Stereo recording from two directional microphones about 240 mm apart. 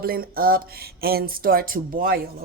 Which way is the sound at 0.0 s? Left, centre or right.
Right.